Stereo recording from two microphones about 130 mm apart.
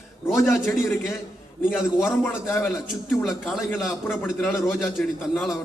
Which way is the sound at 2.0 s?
20° left (ahead or behind).